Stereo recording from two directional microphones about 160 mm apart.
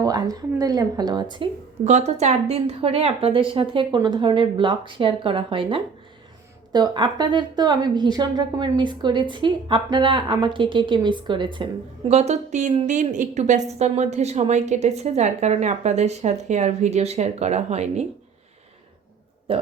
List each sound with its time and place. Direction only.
0.0 s speech: 25° right (ahead or behind)
1.8 s a woman's voice: 45° right (ahead or behind)
19.5 s a woman's voice: 35° right (ahead or behind)